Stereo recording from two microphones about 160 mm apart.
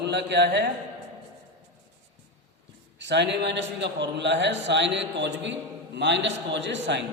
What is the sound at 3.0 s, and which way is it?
A man's voice, 90° right.